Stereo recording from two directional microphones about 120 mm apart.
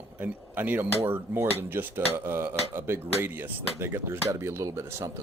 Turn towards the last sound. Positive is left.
turn(degrees=-25)  # may be behind; listen again after turning